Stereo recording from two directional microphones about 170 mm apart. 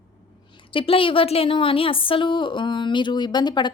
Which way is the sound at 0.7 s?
30° left (ahead or behind).